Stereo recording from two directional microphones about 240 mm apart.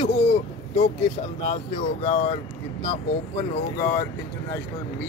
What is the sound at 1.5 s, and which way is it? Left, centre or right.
Speech, left.